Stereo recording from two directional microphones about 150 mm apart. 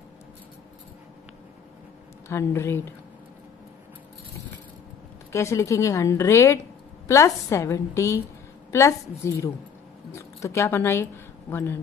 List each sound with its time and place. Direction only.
2.2 s speech: 15° left (ahead or behind)
5.3 s a woman's voice: 20° left (ahead or behind)